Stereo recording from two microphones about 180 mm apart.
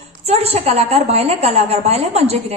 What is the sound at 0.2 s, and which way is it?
A woman's voice, 35° right (ahead or behind).